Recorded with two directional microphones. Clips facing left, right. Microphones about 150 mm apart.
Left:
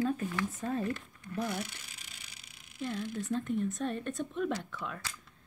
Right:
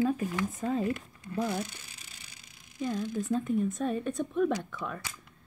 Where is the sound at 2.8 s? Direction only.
20° right (ahead or behind).